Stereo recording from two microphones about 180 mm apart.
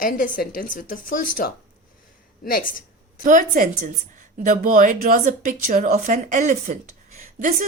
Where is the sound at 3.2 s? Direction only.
45° right (ahead or behind).